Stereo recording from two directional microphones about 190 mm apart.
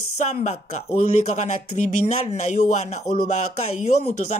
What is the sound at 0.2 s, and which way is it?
Speech, 35° left (ahead or behind).